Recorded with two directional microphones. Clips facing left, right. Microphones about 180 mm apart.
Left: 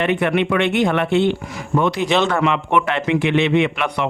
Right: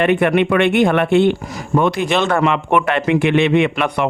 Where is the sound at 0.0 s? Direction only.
55° right (ahead or behind).